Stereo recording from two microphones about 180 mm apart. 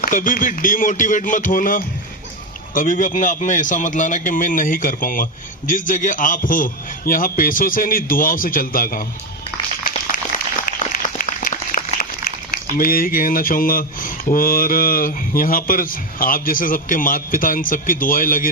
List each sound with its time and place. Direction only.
0.0 s speech: 50° left (ahead or behind)
11.0 s applause: 45° left (ahead or behind)
12.7 s speech: 50° left (ahead or behind)